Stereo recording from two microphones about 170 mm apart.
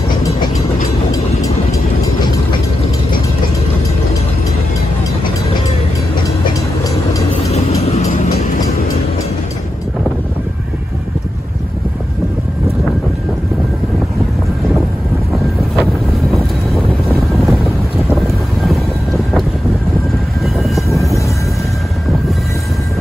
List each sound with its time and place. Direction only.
7.9 s vehicle: 40° left (ahead or behind)
16.3 s vehicle: centre (ahead or behind)
18.1 s boat: centre (ahead or behind)
20.4 s vehicle: centre (ahead or behind)